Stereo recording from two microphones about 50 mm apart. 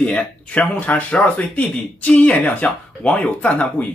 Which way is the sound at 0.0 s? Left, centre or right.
Left.